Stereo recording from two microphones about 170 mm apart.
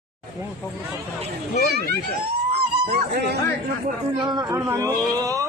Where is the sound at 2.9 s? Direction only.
70° right (ahead or behind).